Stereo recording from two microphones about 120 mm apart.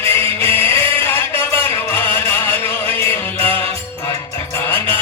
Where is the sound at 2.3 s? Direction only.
20° left (ahead or behind).